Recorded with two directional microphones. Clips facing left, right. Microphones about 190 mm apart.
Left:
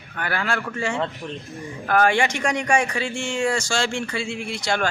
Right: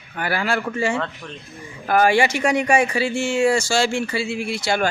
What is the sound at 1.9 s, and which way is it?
Speech, 10° right (ahead or behind).